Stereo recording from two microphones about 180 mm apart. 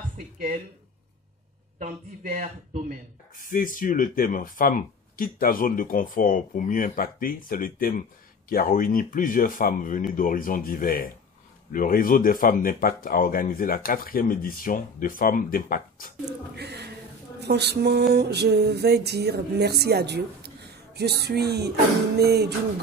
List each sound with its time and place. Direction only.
1.8 s speech: 45° right (ahead or behind)
3.3 s speech: 50° left (ahead or behind)
16.5 s music: 65° right (ahead or behind)